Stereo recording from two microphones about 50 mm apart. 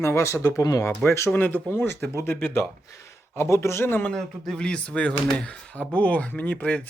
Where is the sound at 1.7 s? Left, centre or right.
Left.